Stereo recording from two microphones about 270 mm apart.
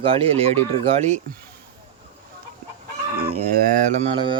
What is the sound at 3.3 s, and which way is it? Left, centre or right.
Mantra, right.